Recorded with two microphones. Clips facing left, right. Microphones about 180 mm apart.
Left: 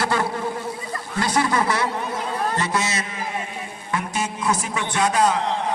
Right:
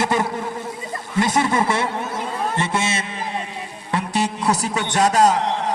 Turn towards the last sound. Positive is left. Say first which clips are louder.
# right 4 dB
turn(degrees=-40)  # may be behind; listen again after turning